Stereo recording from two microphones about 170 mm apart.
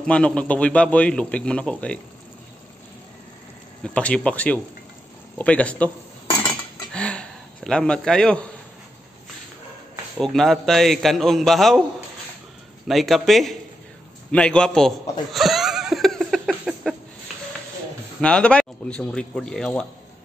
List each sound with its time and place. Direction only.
0.0 s a man's voice: 5° left (ahead or behind)
3.8 s a man's voice: 5° left (ahead or behind)
6.3 s cutlery: 20° left (ahead or behind)
6.9 s a sound: 5° left (ahead or behind)
10.1 s a man's voice: centre (ahead or behind)
12.8 s a man's voice: centre (ahead or behind)
14.3 s chuckle: 5° left (ahead or behind)
16.4 s a sound: 5° right (ahead or behind)
18.2 s a man's voice: 5° left (ahead or behind)